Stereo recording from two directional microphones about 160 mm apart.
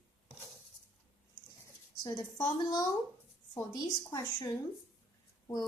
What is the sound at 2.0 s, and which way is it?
Speech, 20° left (ahead or behind).